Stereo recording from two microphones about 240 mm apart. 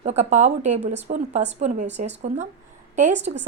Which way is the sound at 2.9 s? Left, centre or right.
Right.